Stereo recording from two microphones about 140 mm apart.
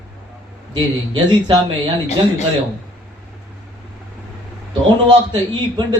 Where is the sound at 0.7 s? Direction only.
35° right (ahead or behind).